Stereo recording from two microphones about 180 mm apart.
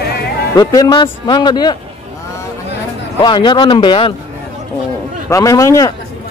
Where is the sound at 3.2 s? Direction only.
25° left (ahead or behind).